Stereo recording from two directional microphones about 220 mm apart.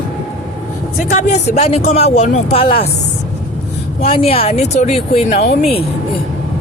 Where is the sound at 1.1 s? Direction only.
30° left (ahead or behind).